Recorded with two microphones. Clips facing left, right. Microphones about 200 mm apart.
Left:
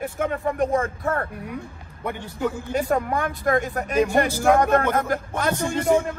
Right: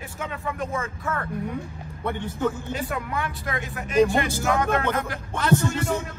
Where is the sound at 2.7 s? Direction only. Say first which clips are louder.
Left 7 dB; 45° left (ahead or behind).